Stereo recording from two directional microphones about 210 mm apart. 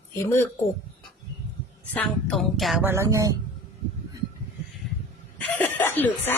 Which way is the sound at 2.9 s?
15° right (ahead or behind).